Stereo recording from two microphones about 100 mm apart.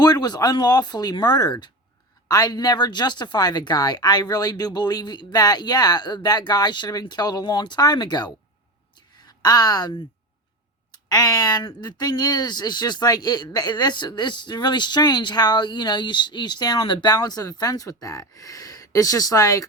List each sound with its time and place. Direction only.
0.0 s speech: 45° left (ahead or behind)
9.0 s a sound: 45° left (ahead or behind)
10.9 s speech: 40° left (ahead or behind)